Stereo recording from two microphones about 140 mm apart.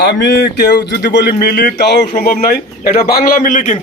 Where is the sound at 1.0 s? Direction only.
90° left; by 3.8 s 65° left (ahead or behind).